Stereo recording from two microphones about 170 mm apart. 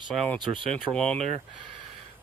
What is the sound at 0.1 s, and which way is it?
Speech, centre (ahead or behind).